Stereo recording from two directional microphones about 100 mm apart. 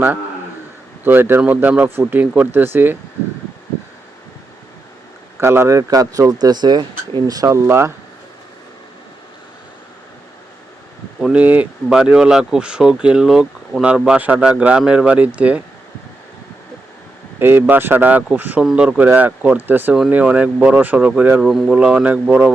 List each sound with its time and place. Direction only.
1.0 s speech: 20° right (ahead or behind)
5.4 s speech: 25° right (ahead or behind); by 7.5 s 40° right (ahead or behind)
7.5 s speech: 25° right (ahead or behind)
11.2 s speech: 10° right (ahead or behind)
17.4 s speech: 20° right (ahead or behind)